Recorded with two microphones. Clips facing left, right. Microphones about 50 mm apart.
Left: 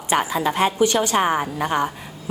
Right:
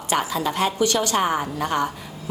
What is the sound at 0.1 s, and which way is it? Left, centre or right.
A woman's voice, left.